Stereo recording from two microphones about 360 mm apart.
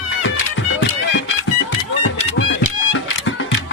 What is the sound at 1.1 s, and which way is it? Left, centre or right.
Music, left.